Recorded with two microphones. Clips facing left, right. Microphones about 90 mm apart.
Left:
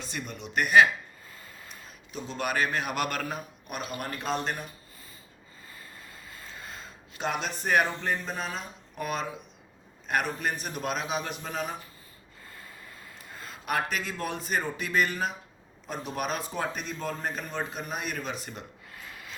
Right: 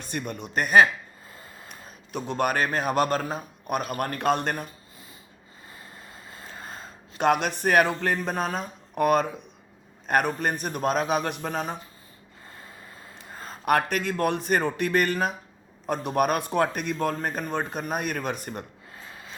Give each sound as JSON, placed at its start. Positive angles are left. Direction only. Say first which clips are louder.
{"t": 0.0, "sound": "speech", "louder": "right 5 dB", "side_deg": -50}
{"t": 1.3, "sound": "a sound", "louder": "right 4 dB", "side_deg": -30}
{"t": 2.1, "sound": "a man's voice", "louder": "right 5 dB", "side_deg": -55}
{"t": 3.7, "sound": "speech", "louder": "right 8 dB", "side_deg": -50}
{"t": 5.7, "sound": "vehicle", "louder": "right 2 dB", "side_deg": -25}
{"t": 6.5, "sound": "gasp", "louder": "right 3 dB", "side_deg": -40}
{"t": 7.2, "sound": "speech", "louder": "right 9 dB", "side_deg": -60}
{"t": 12.5, "sound": "a sound", "louder": "right 2 dB", "side_deg": -35}
{"t": 13.7, "sound": "speech", "louder": "right 7 dB", "side_deg": -55}
{"t": 18.9, "sound": "rub", "louder": "right 1 dB", "side_deg": -30}